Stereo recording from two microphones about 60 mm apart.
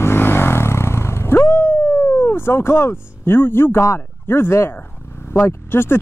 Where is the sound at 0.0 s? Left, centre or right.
Left.